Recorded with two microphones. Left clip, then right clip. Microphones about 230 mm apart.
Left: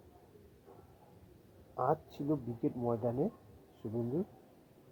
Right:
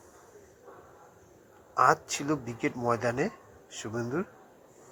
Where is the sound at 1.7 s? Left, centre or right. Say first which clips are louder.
Right 10 dB; right.